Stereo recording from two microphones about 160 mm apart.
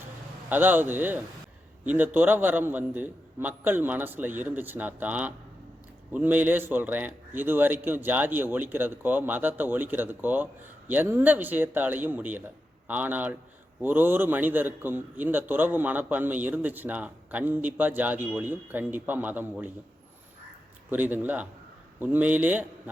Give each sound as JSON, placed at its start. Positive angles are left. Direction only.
{"t": 0.5, "sound": "a man's voice", "side_deg": -10}
{"t": 20.9, "sound": "a man's voice", "side_deg": -10}